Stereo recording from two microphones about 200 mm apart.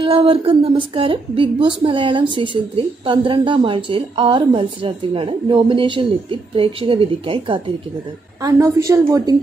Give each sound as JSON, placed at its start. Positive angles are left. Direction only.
{"t": 0.0, "sound": "a woman's voice", "side_deg": -30}